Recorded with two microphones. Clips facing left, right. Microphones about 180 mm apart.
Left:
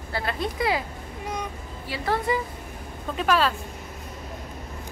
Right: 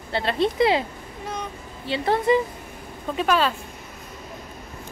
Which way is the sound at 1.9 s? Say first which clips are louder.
Right 5 dB; 20° right (ahead or behind).